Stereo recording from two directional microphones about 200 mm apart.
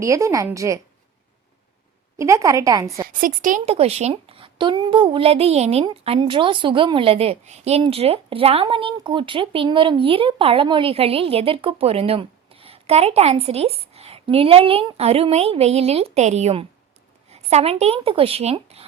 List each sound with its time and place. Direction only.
0.0 s a woman's voice: 15° right (ahead or behind)
2.1 s a woman's voice: 15° right (ahead or behind)
3.1 s a woman's voice: 40° right (ahead or behind)